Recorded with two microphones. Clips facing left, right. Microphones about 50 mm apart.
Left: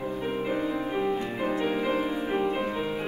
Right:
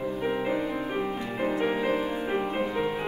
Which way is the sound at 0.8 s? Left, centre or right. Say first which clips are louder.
Left 2 dB; centre.